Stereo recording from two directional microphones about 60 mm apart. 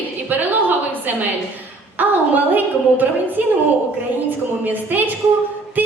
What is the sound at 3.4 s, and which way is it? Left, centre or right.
A woman's voice, right.